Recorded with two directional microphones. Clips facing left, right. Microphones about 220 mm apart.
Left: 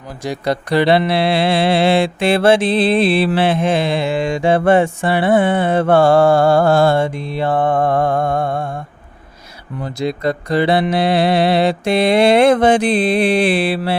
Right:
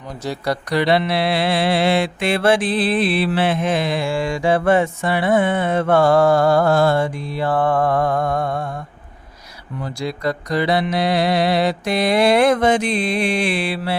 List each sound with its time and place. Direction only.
0.2 s mantra: 20° left (ahead or behind)
9.8 s mantra: 25° left (ahead or behind)